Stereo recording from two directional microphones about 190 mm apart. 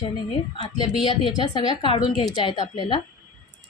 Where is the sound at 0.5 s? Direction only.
25° left (ahead or behind).